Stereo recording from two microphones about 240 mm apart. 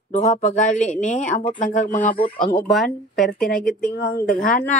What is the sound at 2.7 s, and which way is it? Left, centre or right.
Speech, centre.